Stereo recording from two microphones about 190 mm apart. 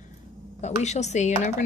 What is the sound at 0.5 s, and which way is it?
A woman's voice, 35° left (ahead or behind).